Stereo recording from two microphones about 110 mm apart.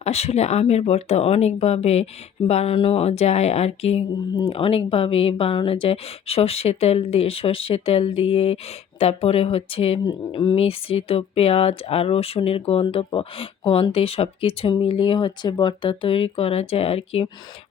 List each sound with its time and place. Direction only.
0.0 s speech: 75° left (ahead or behind)
4.4 s speech: 55° left (ahead or behind)
10.1 s speech: 45° left (ahead or behind)